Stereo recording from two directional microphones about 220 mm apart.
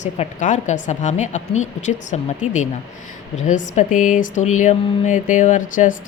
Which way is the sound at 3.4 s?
35° left (ahead or behind).